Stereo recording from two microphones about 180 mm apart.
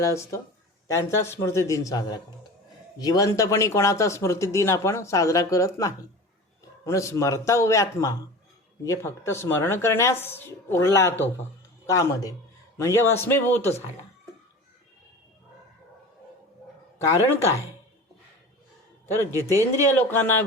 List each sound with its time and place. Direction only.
0.0 s speech: 15° left (ahead or behind)
17.1 s speech: 15° left (ahead or behind)
19.2 s speech: 15° right (ahead or behind)
19.9 s speech: 10° left (ahead or behind)